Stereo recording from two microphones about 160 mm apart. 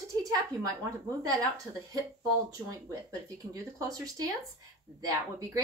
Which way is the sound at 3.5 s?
20° right (ahead or behind).